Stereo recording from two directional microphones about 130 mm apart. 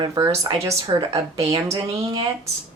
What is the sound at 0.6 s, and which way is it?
Speech, 25° right (ahead or behind).